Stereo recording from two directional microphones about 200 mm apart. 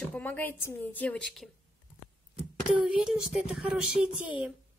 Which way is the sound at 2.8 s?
5° right (ahead or behind).